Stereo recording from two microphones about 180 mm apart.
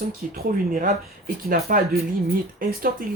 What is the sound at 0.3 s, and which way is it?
Speech, 50° right (ahead or behind).